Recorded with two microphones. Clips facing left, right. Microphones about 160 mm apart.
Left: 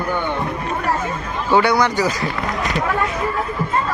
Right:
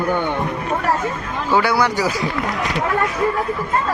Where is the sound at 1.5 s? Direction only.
5° right (ahead or behind).